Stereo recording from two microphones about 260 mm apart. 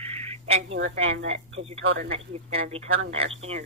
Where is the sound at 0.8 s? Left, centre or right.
Right.